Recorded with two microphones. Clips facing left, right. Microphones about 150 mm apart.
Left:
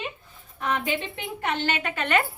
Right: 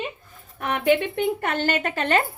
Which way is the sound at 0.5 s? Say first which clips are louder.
Right 7 dB; 60° right (ahead or behind).